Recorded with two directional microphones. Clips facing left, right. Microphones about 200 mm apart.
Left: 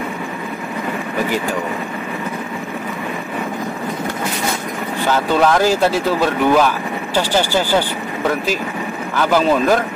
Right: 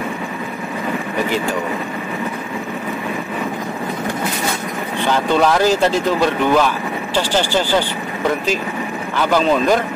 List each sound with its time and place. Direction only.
5.1 s speech: 5° left (ahead or behind)
9.3 s speech: 5° left (ahead or behind)